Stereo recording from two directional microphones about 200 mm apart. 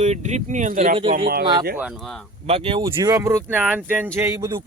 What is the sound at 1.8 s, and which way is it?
Speech, centre (ahead or behind).